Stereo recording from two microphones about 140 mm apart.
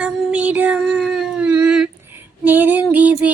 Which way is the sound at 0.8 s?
Centre (ahead or behind).